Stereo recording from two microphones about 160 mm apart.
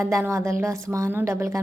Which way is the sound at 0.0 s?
15° right (ahead or behind).